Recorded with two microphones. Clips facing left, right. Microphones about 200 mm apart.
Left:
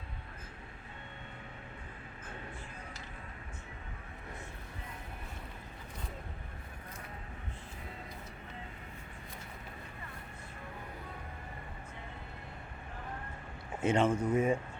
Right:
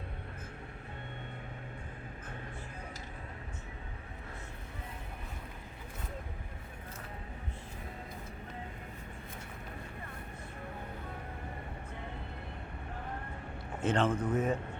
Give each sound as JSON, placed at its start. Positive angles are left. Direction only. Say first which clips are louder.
{"t": 13.8, "sound": "speech", "louder": "left 1 dB", "side_deg": 10}